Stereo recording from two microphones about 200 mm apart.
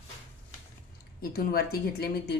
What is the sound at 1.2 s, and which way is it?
Speech, 50° left (ahead or behind).